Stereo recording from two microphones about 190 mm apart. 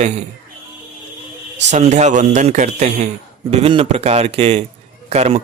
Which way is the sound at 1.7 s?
35° right (ahead or behind).